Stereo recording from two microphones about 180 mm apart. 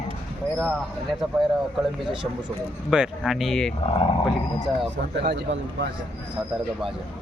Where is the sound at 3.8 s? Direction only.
35° left (ahead or behind).